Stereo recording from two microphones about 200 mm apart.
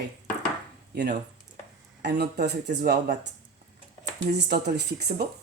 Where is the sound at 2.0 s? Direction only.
55° right (ahead or behind).